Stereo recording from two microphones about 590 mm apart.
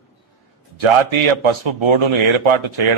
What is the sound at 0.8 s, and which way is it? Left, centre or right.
A man's voice, right.